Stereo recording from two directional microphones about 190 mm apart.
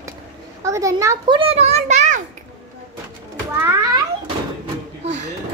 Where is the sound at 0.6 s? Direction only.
15° right (ahead or behind).